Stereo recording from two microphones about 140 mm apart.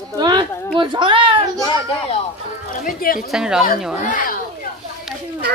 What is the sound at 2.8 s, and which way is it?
Speech, 90° left.